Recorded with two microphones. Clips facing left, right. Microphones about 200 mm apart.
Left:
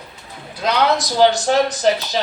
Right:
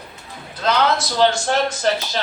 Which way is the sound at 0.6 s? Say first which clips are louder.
Left 1 dB; 15° left (ahead or behind).